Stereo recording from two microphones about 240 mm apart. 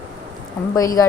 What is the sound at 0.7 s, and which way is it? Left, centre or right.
Speech, centre.